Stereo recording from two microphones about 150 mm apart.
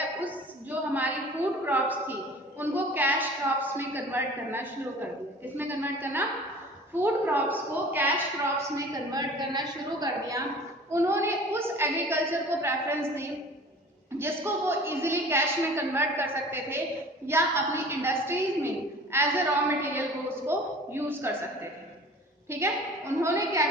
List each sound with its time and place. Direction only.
0.7 s a sound: 10° right (ahead or behind)
1.6 s a woman's voice: 10° right (ahead or behind)
8.7 s a woman's voice: 25° right (ahead or behind)
22.4 s a woman's voice: 15° right (ahead or behind)